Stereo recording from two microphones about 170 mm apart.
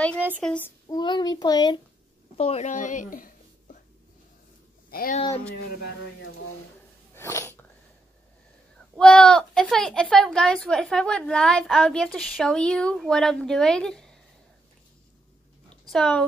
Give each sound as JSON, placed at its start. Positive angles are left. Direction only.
{"t": 0.4, "sound": "child singing", "side_deg": 10}
{"t": 0.8, "sound": "a child's voice", "side_deg": 25}
{"t": 2.3, "sound": "speech", "side_deg": 40}
{"t": 4.9, "sound": "speech", "side_deg": 60}
{"t": 7.2, "sound": "sneeze", "side_deg": 15}
{"t": 8.9, "sound": "speech", "side_deg": 5}
{"t": 15.9, "sound": "speech", "side_deg": 5}